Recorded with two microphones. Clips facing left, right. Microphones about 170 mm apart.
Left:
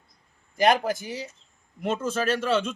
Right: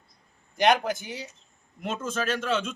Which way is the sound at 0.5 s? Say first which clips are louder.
Left 1 dB; 5° left (ahead or behind).